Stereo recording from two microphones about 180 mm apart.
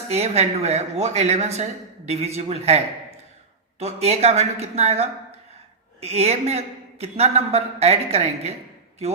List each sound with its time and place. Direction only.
0.1 s speech: 35° right (ahead or behind)